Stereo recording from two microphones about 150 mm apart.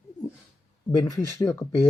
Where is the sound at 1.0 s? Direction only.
25° left (ahead or behind).